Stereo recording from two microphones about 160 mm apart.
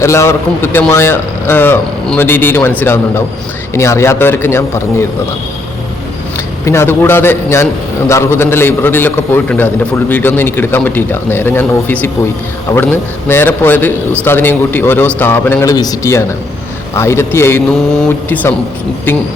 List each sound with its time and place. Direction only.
0.0 s a man's voice: 15° left (ahead or behind)
6.7 s a man's voice: 15° left (ahead or behind)